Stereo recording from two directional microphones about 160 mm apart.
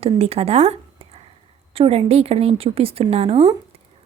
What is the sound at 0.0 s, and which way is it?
A woman's voice, 40° right (ahead or behind).